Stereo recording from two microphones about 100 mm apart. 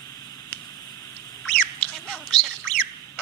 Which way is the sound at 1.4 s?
10° left (ahead or behind).